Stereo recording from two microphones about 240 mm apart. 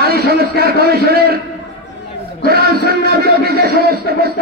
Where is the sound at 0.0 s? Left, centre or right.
Right.